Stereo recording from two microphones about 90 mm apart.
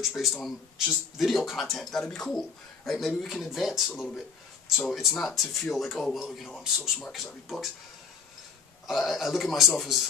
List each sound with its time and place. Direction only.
0.0 s speech: centre (ahead or behind)
8.8 s speech: centre (ahead or behind)